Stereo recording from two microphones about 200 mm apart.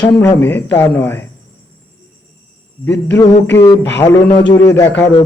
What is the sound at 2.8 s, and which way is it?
A man's voice, 10° left (ahead or behind).